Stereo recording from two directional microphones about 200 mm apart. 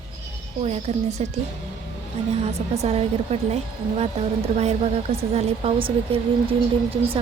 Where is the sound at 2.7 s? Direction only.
30° right (ahead or behind).